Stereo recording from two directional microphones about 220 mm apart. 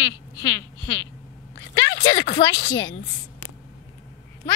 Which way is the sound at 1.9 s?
55° left (ahead or behind).